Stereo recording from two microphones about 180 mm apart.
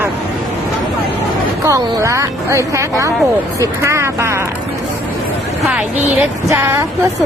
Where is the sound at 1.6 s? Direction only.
15° right (ahead or behind).